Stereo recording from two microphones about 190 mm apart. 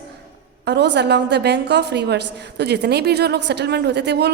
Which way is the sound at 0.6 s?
65° right (ahead or behind).